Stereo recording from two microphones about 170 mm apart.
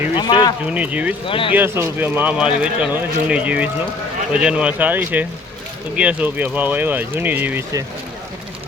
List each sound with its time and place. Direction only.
0.2 s speech: 25° left (ahead or behind)
0.7 s speech: 10° right (ahead or behind)
1.3 s speech: 30° left (ahead or behind)
1.5 s speech: 15° right (ahead or behind)